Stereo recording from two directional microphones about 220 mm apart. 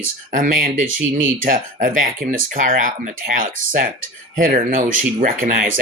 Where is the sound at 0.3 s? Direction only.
40° right (ahead or behind).